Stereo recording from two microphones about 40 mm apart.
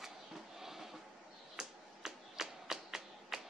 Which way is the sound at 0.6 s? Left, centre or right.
Centre.